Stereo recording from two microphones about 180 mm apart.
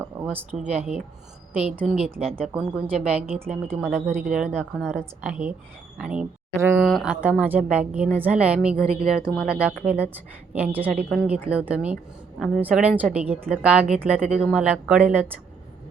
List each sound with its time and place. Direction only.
0.0 s a woman's voice: 10° right (ahead or behind)
2.2 s speech: 35° right (ahead or behind)
2.5 s a woman's voice: 5° right (ahead or behind)
4.5 s a woman's voice: 5° left (ahead or behind); by 6.8 s 15° right (ahead or behind)
6.8 s a woman's voice: centre (ahead or behind)